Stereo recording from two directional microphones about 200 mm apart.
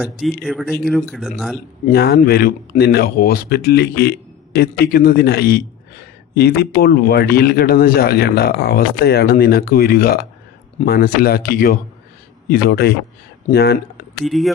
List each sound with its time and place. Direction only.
0.0 s speech: centre (ahead or behind)
1.9 s a man's voice: 50° left (ahead or behind)
14.3 s speech: centre (ahead or behind)